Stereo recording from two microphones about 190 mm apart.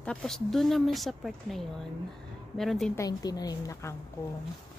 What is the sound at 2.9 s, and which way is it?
A woman's voice, 20° left (ahead or behind).